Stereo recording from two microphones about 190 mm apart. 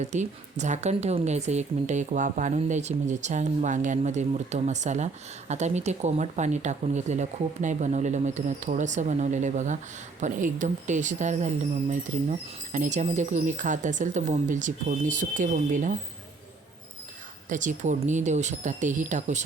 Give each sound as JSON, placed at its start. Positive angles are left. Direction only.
{"t": 0.0, "sound": "speech", "side_deg": -40}
{"t": 17.5, "sound": "speech", "side_deg": -40}